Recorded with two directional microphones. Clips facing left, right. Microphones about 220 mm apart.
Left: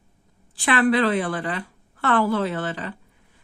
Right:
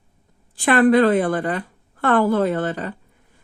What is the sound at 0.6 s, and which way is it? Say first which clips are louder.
Speech: right 5 dB; 45° right (ahead or behind).